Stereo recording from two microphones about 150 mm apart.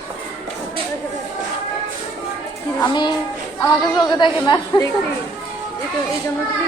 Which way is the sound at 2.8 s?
30° left (ahead or behind).